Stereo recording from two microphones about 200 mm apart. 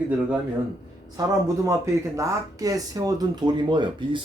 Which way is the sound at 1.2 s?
20° right (ahead or behind).